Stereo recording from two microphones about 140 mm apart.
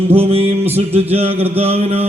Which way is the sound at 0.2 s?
45° right (ahead or behind).